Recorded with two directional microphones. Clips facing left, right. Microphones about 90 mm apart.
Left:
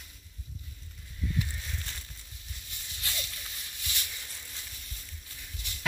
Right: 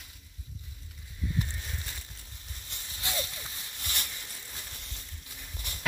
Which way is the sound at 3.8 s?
55° right (ahead or behind).